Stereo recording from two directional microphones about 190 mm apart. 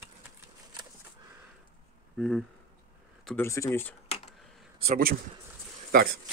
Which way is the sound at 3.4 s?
15° left (ahead or behind).